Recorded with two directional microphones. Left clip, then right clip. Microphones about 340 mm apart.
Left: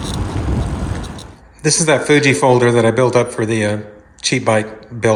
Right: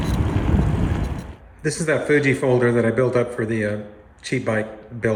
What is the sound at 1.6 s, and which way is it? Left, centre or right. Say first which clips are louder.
A man's voice: left 7 dB; centre.